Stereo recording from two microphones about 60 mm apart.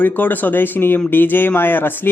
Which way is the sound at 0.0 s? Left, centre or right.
Left.